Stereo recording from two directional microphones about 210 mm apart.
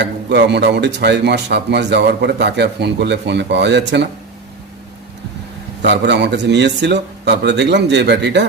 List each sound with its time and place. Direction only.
0.0 s a man's voice: 55° right (ahead or behind)
5.8 s a man's voice: 55° right (ahead or behind)